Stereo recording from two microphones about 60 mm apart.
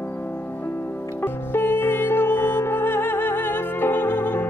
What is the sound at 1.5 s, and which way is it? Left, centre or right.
Music, left.